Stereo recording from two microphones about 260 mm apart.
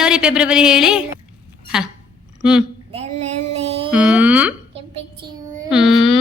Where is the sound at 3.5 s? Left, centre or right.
Right.